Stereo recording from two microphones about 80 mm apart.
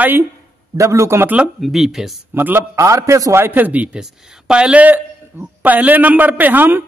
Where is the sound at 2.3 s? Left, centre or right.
Right.